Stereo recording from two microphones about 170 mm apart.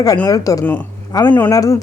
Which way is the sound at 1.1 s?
20° left (ahead or behind).